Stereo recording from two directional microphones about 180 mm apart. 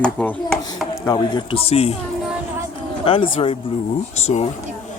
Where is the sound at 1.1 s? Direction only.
25° left (ahead or behind).